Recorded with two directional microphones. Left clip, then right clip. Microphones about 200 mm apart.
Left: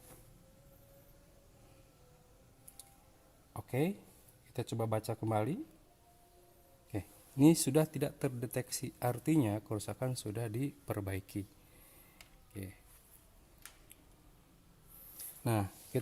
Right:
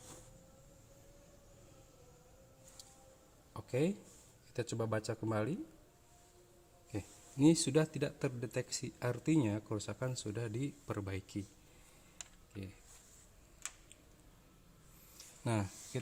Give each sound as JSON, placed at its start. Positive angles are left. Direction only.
{"t": 3.5, "sound": "speech", "side_deg": 40}
{"t": 6.9, "sound": "speech", "side_deg": 35}
{"t": 15.4, "sound": "speech", "side_deg": 30}